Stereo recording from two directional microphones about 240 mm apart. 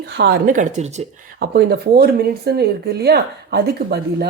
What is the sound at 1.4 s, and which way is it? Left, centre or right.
A woman's voice, right.